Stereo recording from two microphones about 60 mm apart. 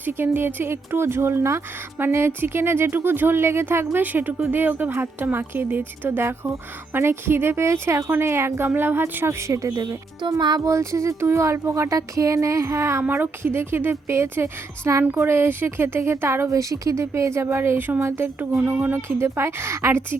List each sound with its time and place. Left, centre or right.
0.1 s speech: right
9.5 s speech: right
13.1 s speech: right
15.2 s speech: right
16.5 s speech: right
18.5 s speech: right